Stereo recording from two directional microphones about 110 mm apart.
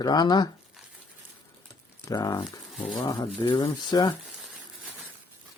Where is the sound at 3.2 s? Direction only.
45° left (ahead or behind).